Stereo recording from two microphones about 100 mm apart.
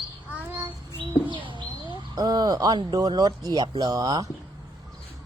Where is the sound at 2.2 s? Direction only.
45° right (ahead or behind).